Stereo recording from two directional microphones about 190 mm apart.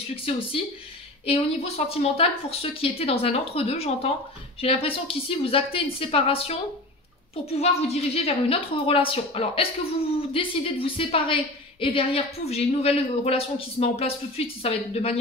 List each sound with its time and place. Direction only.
0.1 s a woman's voice: 30° left (ahead or behind)